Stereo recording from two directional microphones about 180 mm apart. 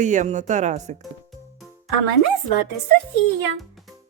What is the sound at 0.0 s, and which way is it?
Speech, 45° right (ahead or behind).